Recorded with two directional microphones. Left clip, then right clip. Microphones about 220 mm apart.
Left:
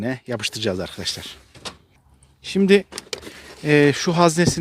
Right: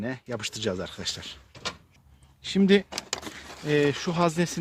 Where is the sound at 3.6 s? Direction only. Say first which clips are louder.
Left 8 dB; 30° left (ahead or behind).